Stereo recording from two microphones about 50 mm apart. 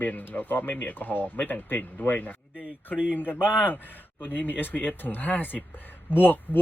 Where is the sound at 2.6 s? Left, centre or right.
Right.